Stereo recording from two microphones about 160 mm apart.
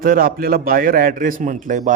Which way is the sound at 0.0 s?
60° right (ahead or behind).